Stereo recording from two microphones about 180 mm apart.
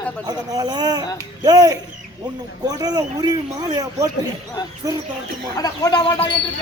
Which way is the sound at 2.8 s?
20° right (ahead or behind).